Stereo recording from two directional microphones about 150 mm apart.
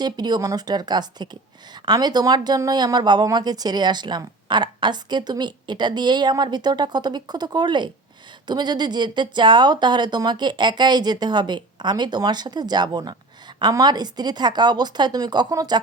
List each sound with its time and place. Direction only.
0.0 s a woman's voice: 25° right (ahead or behind)